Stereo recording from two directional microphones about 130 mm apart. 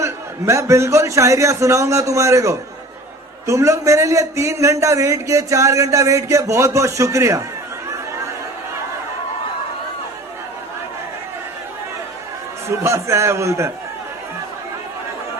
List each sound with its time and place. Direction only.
0.0 s a man's voice: 25° right (ahead or behind)
12.6 s a man's voice: 20° right (ahead or behind)